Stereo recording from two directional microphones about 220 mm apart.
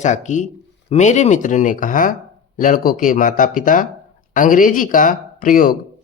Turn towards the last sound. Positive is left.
turn(degrees=40)  # may be behind; listen again after turning